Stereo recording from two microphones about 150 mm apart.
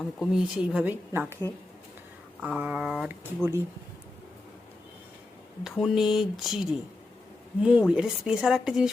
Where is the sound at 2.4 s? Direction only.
10° right (ahead or behind).